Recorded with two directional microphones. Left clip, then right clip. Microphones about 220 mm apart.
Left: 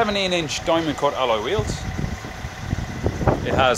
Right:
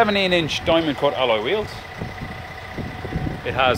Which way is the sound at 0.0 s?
15° right (ahead or behind).